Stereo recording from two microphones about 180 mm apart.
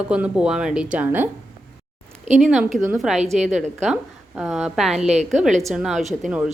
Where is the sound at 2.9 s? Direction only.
5° right (ahead or behind).